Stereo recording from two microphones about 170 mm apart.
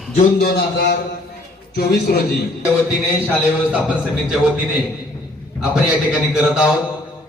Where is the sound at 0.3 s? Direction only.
70° left (ahead or behind).